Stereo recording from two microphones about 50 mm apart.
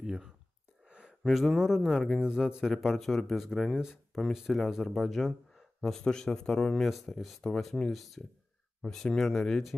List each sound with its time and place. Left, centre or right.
0.0 s speech: centre
0.8 s a sound: right
1.2 s speech: centre
2.1 s speech: centre
3.7 s speech: centre
7.4 s speech: centre